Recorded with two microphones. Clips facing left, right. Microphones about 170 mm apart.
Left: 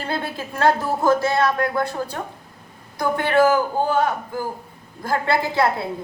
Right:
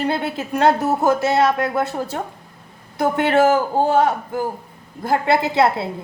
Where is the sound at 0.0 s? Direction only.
20° right (ahead or behind).